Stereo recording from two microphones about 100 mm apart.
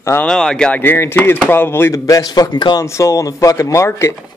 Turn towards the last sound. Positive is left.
turn(degrees=30)  # may be behind; listen again after turning